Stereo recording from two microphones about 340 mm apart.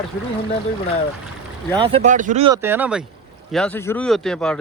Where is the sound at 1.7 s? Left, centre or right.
Centre.